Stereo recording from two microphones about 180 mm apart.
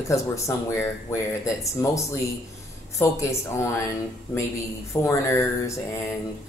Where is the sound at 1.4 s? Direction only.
15° left (ahead or behind).